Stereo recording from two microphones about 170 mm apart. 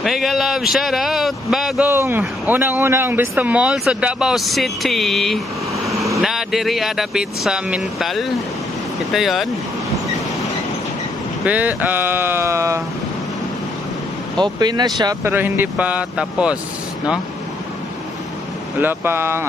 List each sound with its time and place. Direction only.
0.0 s speech: centre (ahead or behind)
1.9 s speech: 15° right (ahead or behind)
11.4 s speech: 10° right (ahead or behind)
14.4 s speech: 25° right (ahead or behind); by 16.5 s 5° right (ahead or behind)
18.8 s speech: 10° right (ahead or behind)